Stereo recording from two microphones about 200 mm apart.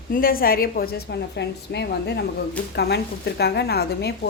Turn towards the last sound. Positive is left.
turn(degrees=55)  # may be behind; listen again after turning